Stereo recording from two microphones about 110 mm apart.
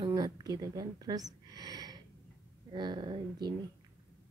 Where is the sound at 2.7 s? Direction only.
45° right (ahead or behind).